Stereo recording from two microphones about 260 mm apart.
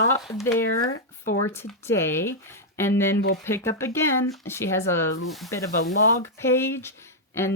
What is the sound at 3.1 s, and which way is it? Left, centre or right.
Speech, left.